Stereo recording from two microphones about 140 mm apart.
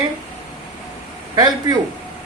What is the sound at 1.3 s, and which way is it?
Speech, 30° right (ahead or behind).